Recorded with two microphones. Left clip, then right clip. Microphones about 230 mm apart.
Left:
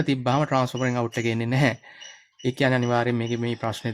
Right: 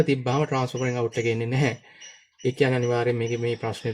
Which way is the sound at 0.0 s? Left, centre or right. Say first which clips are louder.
Even; left.